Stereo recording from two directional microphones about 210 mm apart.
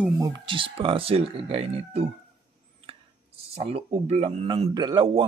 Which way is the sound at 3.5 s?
25° right (ahead or behind).